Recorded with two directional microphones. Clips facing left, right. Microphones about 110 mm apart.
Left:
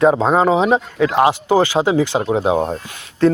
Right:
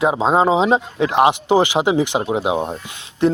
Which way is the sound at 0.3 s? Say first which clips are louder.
Left 1 dB; 20° right (ahead or behind).